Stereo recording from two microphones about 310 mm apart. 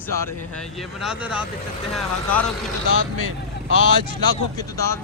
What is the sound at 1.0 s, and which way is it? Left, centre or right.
Speech, centre.